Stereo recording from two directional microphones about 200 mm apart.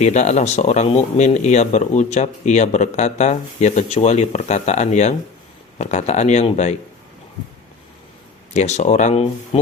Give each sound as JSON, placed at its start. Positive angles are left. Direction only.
{"t": 0.0, "sound": "speech", "side_deg": 35}
{"t": 8.5, "sound": "speech", "side_deg": 35}